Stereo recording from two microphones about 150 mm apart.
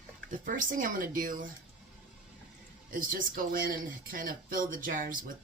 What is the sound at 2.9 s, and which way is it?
Speech, 65° right (ahead or behind).